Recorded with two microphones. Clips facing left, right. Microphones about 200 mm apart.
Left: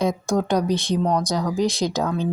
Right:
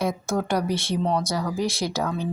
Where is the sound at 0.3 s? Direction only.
15° left (ahead or behind).